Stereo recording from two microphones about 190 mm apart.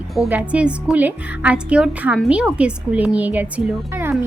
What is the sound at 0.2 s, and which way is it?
A woman's voice, 5° right (ahead or behind).